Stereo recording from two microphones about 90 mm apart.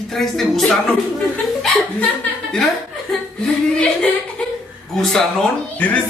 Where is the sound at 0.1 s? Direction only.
5° left (ahead or behind).